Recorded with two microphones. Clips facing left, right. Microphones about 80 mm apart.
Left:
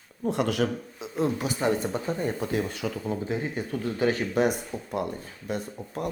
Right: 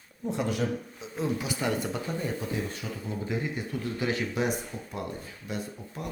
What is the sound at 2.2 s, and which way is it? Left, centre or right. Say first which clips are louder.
Speech: left 4 dB; left.